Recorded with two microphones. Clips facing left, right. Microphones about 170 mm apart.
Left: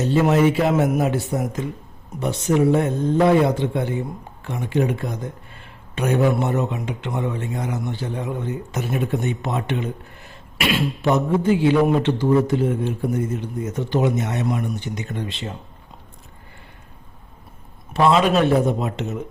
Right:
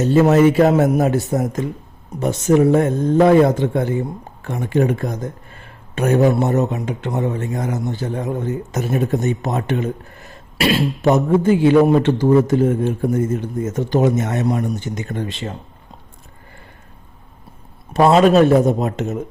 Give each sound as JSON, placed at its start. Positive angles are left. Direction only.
{"t": 0.1, "sound": "a man's voice", "side_deg": -45}
{"t": 17.9, "sound": "a man's voice", "side_deg": -45}